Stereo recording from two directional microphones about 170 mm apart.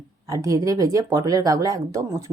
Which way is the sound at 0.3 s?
20° right (ahead or behind).